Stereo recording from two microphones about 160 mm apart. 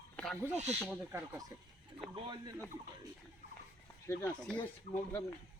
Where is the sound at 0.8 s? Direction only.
10° right (ahead or behind).